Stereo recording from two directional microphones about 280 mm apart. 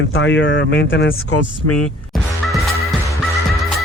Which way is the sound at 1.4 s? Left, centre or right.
Left.